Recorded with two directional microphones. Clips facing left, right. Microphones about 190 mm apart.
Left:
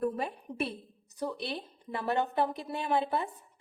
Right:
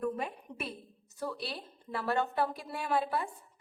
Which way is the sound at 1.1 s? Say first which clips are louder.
Left 3 dB; 20° left (ahead or behind).